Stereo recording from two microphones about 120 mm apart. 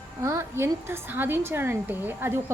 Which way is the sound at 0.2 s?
20° right (ahead or behind).